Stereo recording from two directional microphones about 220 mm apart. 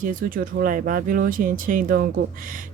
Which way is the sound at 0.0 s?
40° right (ahead or behind).